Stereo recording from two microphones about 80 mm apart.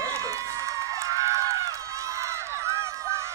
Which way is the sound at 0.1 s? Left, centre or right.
Right.